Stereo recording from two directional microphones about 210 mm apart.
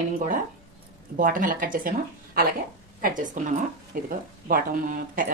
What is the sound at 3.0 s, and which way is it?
A woman's voice, 40° right (ahead or behind).